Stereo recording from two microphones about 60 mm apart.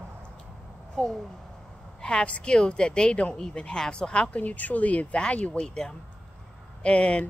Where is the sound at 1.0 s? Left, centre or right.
Left.